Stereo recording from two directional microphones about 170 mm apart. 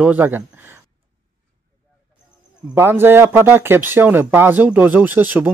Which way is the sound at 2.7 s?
15° right (ahead or behind).